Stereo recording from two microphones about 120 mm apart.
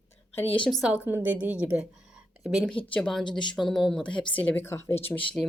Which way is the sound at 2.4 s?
Centre (ahead or behind).